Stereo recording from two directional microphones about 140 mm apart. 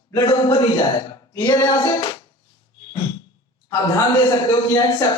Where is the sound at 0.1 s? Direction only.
30° left (ahead or behind).